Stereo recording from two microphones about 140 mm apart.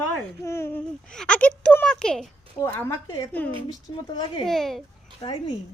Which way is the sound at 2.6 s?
15° left (ahead or behind).